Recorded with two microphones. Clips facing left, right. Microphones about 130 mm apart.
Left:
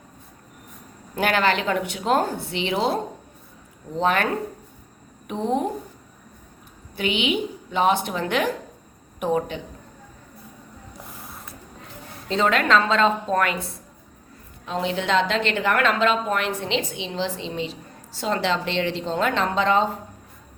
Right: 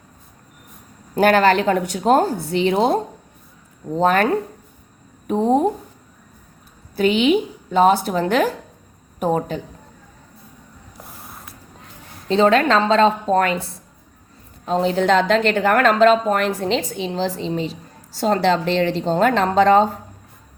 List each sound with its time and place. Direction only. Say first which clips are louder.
1.1 s a woman's voice: right 7 dB; 40° right (ahead or behind)
5.3 s a woman's voice: right 7 dB; 40° right (ahead or behind)
6.9 s a woman's voice: right 8 dB; 40° right (ahead or behind)
12.3 s a woman's voice: right 5 dB; 30° right (ahead or behind)